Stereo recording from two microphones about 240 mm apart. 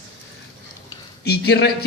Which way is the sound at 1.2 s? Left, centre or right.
Left.